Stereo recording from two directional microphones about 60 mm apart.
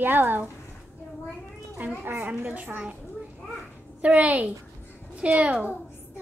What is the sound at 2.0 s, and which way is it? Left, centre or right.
Speech, right.